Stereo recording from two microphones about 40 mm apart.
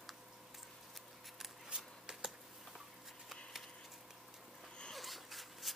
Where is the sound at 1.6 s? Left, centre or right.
Centre.